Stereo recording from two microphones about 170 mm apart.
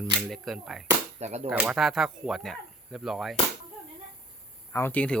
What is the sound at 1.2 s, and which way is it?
Speech, 40° right (ahead or behind).